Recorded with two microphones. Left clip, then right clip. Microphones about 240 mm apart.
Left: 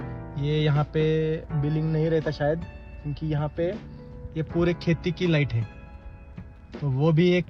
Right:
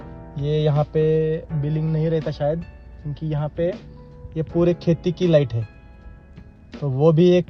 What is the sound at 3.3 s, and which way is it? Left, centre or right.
Speech, left.